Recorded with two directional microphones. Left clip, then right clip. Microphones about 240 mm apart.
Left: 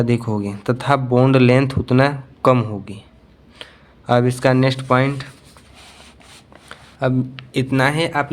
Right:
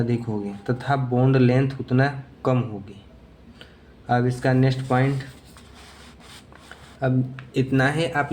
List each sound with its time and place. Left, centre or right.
0.0 s speech: left
7.0 s a man's voice: left